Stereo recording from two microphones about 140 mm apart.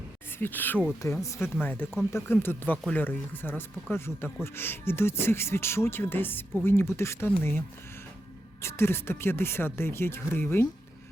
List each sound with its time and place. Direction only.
0.3 s speech: 15° left (ahead or behind)
8.6 s speech: 15° left (ahead or behind)